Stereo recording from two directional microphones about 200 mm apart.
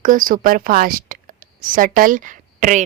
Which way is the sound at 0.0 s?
40° right (ahead or behind).